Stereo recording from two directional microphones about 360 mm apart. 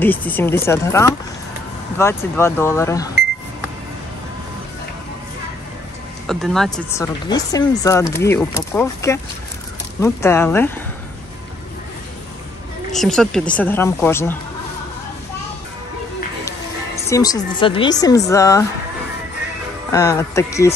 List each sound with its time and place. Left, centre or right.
0.0 s speech: centre
6.2 s speech: centre
12.9 s speech: centre
17.1 s speech: centre
19.9 s speech: centre